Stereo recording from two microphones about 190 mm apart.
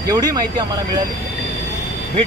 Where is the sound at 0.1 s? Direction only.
20° right (ahead or behind).